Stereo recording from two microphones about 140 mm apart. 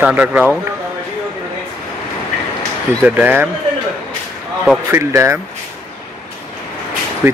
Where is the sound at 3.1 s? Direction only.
10° right (ahead or behind).